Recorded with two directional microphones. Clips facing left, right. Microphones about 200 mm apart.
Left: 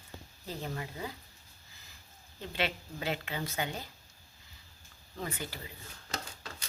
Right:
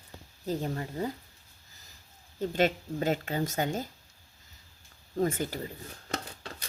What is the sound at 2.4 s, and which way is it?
A woman's voice, 45° right (ahead or behind).